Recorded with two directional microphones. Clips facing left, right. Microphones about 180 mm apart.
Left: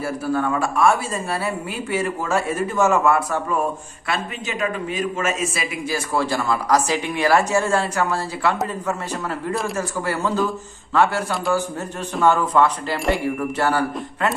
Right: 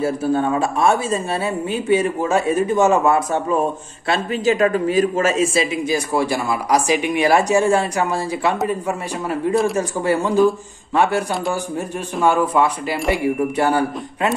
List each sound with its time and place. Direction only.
0.0 s speech: 25° right (ahead or behind)
4.1 s a man's voice: 35° right (ahead or behind)
5.9 s speech: 15° right (ahead or behind)
12.3 s speech: 10° right (ahead or behind)